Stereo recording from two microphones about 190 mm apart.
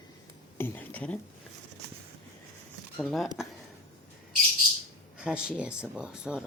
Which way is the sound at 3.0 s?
Centre (ahead or behind).